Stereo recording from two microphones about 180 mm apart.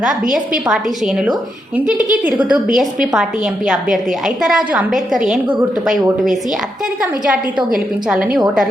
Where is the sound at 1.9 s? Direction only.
20° left (ahead or behind).